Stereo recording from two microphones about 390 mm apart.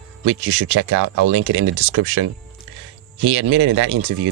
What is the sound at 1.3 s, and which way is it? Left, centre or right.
Speech, right.